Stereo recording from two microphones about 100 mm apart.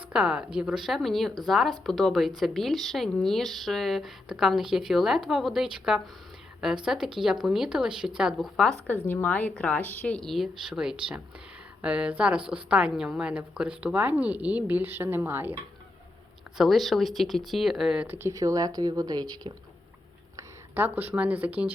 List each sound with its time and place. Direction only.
0.1 s a woman's voice: 10° right (ahead or behind)
9.0 s a woman's voice: 15° left (ahead or behind); by 15.5 s 20° right (ahead or behind)
16.6 s speech: centre (ahead or behind)
18.0 s speech: 25° right (ahead or behind); by 19.5 s 50° right (ahead or behind)
20.3 s speech: 20° right (ahead or behind)